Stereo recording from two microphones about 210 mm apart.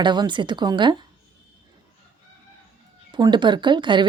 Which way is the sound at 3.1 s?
20° right (ahead or behind).